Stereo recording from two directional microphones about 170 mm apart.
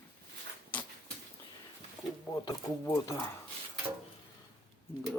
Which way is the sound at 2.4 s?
20° left (ahead or behind).